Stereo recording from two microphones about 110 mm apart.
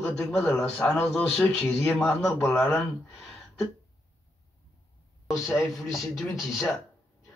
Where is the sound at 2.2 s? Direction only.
20° left (ahead or behind).